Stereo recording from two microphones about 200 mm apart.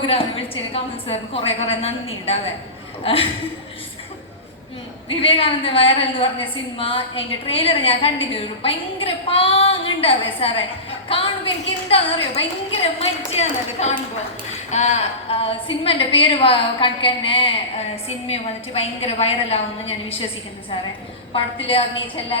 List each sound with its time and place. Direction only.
0.1 s a woman's voice: 25° left (ahead or behind)
5.0 s a woman's voice: 25° left (ahead or behind)
21.3 s a woman's voice: 25° left (ahead or behind)